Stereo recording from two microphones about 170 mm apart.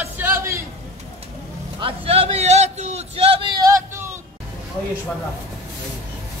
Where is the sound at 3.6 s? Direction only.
15° right (ahead or behind).